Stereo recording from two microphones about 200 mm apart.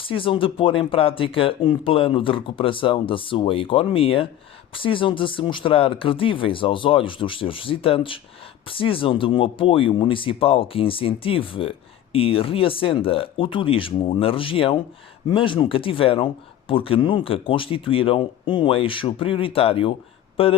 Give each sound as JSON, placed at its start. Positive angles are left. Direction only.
{"t": 0.0, "sound": "speech", "side_deg": 25}